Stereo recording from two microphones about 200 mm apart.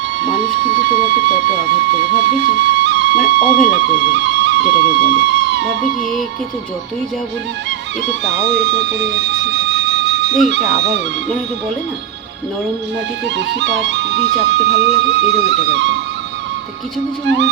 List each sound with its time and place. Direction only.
0.2 s speech: 60° right (ahead or behind)
3.6 s speech: 40° left (ahead or behind)
4.1 s speech: 60° right (ahead or behind)
8.5 s music: 60° right (ahead or behind)
10.8 s speech: 60° right (ahead or behind)
13.2 s speech: 60° right (ahead or behind)
17.2 s speech: 60° right (ahead or behind)